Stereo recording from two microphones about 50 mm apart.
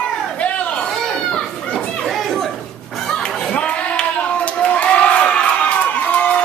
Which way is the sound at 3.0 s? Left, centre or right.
Centre.